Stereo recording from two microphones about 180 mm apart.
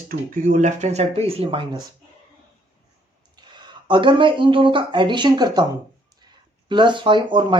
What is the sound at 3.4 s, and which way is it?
Speech, 25° right (ahead or behind).